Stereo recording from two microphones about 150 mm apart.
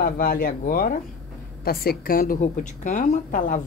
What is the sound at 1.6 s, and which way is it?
A woman's voice, 90° left.